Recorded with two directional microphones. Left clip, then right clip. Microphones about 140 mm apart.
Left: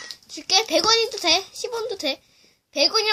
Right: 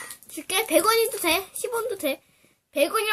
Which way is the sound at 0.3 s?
35° left (ahead or behind).